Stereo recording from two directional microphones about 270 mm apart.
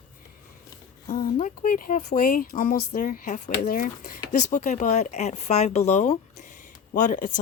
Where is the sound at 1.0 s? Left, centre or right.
Left.